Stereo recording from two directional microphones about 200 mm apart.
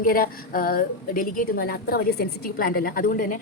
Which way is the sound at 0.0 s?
45° left (ahead or behind).